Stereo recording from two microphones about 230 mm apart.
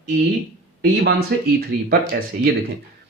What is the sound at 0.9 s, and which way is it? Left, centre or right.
Speech, right.